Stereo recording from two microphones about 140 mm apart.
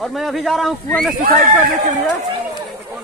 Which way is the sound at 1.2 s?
90° right.